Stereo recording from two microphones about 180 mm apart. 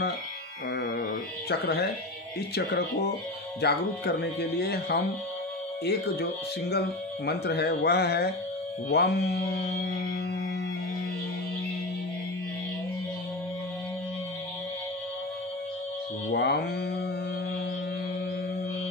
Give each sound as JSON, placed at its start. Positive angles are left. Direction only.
{"t": 0.7, "sound": "a sound", "side_deg": 60}
{"t": 1.5, "sound": "speech", "side_deg": 65}
{"t": 7.2, "sound": "speech", "side_deg": 65}
{"t": 16.3, "sound": "speech", "side_deg": 65}